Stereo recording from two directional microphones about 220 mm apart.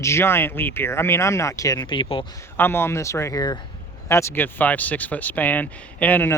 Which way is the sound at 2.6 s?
10° left (ahead or behind).